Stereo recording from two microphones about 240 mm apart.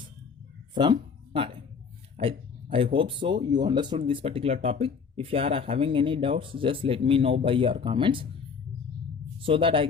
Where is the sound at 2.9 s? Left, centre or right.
Right.